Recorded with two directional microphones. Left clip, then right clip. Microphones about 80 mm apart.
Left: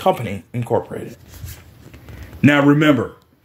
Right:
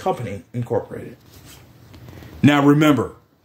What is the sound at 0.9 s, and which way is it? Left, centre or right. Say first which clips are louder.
Speech: left 4 dB; left.